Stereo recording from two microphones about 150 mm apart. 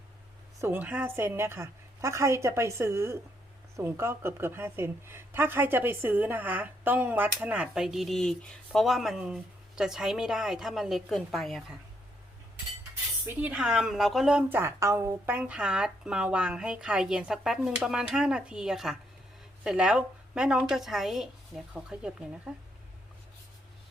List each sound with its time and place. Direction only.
0.6 s a woman's voice: 15° right (ahead or behind)
13.2 s a woman's voice: 10° right (ahead or behind)